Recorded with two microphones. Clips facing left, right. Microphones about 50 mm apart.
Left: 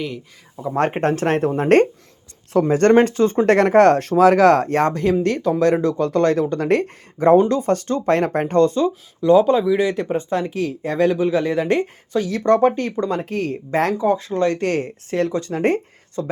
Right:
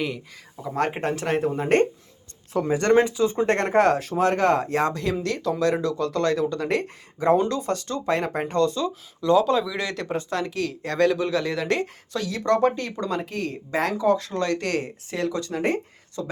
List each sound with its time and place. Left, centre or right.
0.5 s speech: centre
1.0 s speech: left
3.4 s speech: left
9.2 s speech: centre; by 13.9 s left
14.0 s speech: left